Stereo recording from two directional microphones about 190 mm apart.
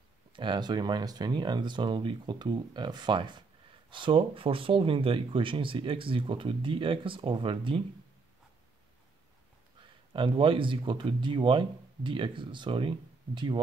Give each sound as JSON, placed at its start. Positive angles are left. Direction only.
{"t": 0.4, "sound": "speech", "side_deg": -25}
{"t": 9.8, "sound": "speech", "side_deg": -25}